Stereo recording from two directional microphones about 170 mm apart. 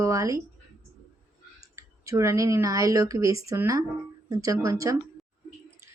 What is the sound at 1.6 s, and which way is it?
A woman's voice, 20° right (ahead or behind).